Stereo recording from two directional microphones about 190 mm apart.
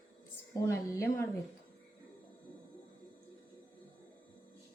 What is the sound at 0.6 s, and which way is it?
Speech, 15° left (ahead or behind).